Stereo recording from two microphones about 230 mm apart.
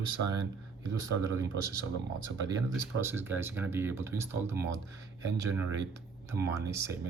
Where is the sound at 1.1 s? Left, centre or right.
Centre.